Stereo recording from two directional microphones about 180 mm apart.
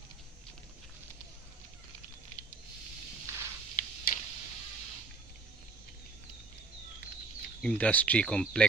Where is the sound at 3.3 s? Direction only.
15° right (ahead or behind).